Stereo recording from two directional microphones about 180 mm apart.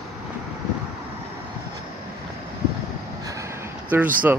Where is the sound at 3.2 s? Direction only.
15° right (ahead or behind).